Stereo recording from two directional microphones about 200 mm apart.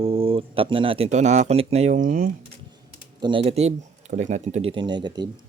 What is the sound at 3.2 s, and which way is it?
A man's voice, 25° right (ahead or behind).